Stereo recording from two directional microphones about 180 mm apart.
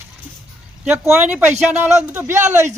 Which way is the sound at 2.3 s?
40° right (ahead or behind).